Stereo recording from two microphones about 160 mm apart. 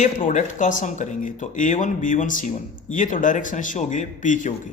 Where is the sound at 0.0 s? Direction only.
55° left (ahead or behind).